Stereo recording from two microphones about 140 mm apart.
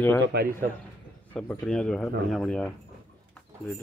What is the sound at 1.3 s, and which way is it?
A man's voice, 10° left (ahead or behind).